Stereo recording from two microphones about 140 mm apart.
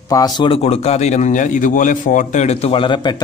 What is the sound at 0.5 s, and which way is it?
A man's voice, 50° left (ahead or behind).